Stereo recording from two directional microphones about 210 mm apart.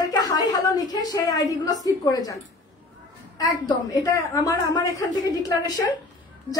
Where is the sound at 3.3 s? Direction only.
20° left (ahead or behind).